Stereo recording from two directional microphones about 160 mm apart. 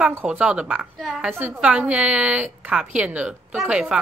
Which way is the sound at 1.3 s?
15° right (ahead or behind).